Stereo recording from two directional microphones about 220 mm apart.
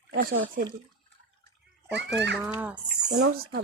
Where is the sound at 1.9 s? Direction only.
50° right (ahead or behind).